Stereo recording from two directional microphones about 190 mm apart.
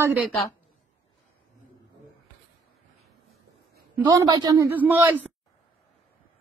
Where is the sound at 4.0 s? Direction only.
20° right (ahead or behind).